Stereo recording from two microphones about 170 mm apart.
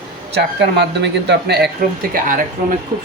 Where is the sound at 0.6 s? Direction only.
85° right.